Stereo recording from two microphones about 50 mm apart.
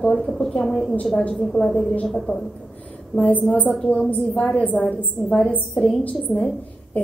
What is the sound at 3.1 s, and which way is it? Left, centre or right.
Speech, left.